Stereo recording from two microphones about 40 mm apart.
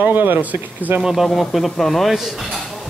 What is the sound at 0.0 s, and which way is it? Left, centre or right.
Speech, right.